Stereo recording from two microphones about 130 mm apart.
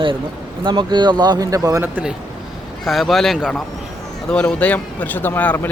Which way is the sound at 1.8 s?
10° right (ahead or behind).